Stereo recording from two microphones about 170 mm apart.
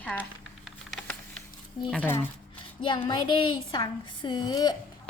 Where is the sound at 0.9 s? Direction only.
5° left (ahead or behind).